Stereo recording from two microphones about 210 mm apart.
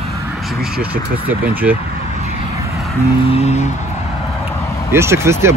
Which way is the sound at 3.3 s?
30° left (ahead or behind).